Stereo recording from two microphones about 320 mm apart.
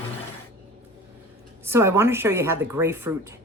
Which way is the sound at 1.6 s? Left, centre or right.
Centre.